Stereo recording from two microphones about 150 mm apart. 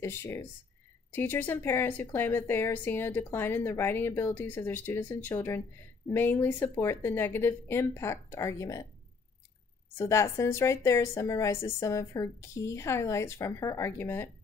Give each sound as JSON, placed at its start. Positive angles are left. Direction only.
{"t": 0.0, "sound": "a woman's voice", "side_deg": 15}
{"t": 9.9, "sound": "a woman's voice", "side_deg": 20}